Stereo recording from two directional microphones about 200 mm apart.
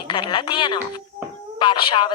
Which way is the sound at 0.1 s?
25° left (ahead or behind).